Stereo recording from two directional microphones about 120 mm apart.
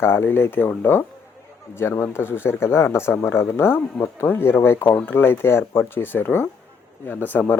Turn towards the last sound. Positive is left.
turn(degrees=15)  # may be behind; listen again after turning